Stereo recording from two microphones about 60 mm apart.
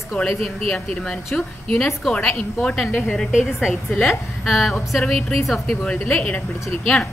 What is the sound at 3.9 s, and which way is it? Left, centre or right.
A woman's voice, centre.